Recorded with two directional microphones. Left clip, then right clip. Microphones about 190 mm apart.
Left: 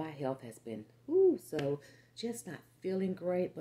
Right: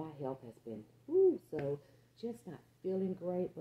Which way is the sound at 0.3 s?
20° left (ahead or behind).